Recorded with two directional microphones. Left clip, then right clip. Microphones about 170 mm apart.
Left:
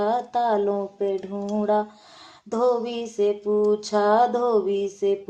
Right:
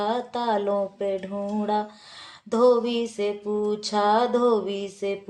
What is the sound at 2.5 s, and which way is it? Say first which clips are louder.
Music: right 3 dB; 35° left (ahead or behind).